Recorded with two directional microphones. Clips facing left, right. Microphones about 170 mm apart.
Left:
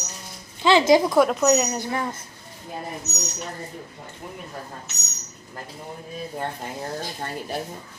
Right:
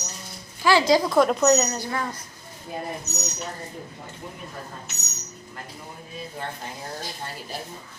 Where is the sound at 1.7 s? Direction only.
20° left (ahead or behind).